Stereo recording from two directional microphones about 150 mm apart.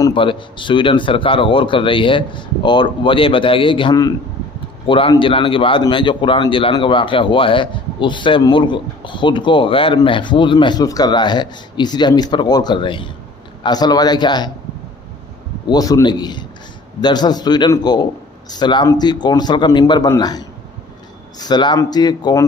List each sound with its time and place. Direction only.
0.0 s a man's voice: 35° left (ahead or behind)
15.7 s a man's voice: 25° left (ahead or behind)